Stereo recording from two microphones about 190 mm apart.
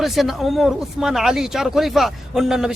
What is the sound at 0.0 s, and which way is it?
Speech, centre (ahead or behind).